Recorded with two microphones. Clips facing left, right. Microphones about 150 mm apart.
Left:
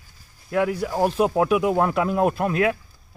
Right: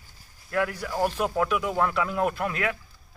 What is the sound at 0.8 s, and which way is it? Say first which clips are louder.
A man's voice: left 5 dB; 30° left (ahead or behind).